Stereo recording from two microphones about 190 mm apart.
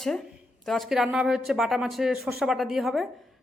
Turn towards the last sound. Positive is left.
turn(degrees=0)  # may be behind; listen again after turning